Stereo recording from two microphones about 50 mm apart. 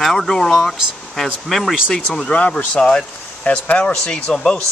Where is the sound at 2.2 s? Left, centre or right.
Left.